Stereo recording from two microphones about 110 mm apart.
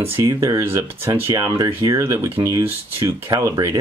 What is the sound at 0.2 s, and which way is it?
Speech, 30° right (ahead or behind).